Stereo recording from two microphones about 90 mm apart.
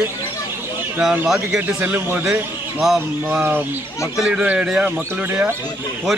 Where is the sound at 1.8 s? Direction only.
20° right (ahead or behind).